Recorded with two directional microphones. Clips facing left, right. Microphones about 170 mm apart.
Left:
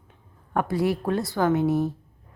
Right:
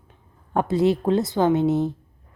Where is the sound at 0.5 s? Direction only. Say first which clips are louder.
Right 4 dB; 25° right (ahead or behind).